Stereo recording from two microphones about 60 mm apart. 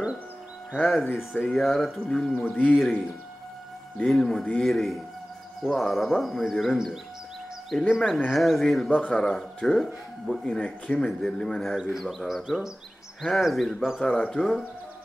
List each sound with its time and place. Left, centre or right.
0.8 s speech: centre
2.3 s speech: left
2.7 s speech: centre
4.1 s speech: centre
8.9 s speech: left
9.2 s speech: centre
11.7 s speech: centre